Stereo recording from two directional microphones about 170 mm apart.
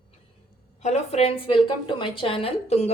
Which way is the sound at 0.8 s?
40° left (ahead or behind).